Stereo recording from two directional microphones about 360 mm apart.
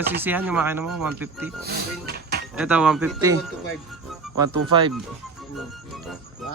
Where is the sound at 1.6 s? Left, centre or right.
Right.